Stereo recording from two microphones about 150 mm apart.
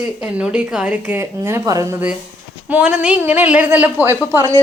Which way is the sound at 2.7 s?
10° right (ahead or behind).